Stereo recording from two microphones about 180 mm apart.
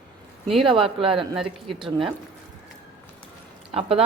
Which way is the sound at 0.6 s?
30° right (ahead or behind).